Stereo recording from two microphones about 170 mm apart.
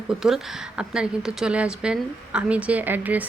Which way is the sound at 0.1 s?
Centre (ahead or behind).